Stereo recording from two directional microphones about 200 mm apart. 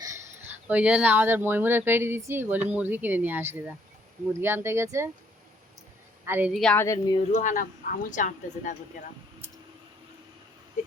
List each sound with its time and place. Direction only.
0.0 s speech: 10° right (ahead or behind)
6.2 s a woman's voice: 10° right (ahead or behind)
6.8 s speech: 15° left (ahead or behind)
7.3 s a woman's voice: 40° left (ahead or behind)